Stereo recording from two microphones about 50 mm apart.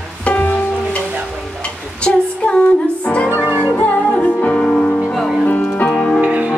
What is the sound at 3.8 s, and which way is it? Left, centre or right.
Music, left.